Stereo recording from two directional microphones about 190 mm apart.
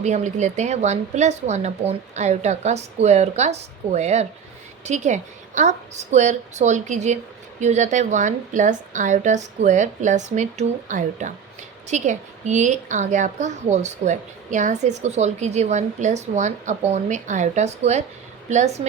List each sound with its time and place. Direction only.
0.0 s a woman's voice: 40° right (ahead or behind)